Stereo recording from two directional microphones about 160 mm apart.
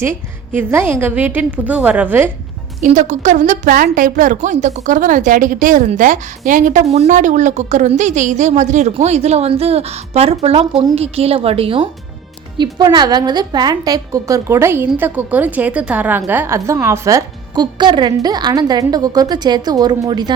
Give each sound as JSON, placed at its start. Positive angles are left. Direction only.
{"t": 0.0, "sound": "a woman's voice", "side_deg": -15}
{"t": 2.8, "sound": "a woman's voice", "side_deg": -50}